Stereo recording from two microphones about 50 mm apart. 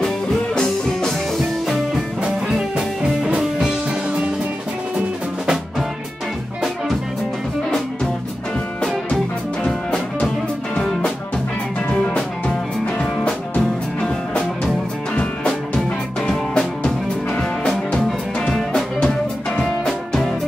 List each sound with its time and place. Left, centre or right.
1.7 s music: centre
8.8 s music: centre
11.9 s music: left; by 16.6 s centre
16.8 s music: left
18.9 s music: centre
19.9 s music: centre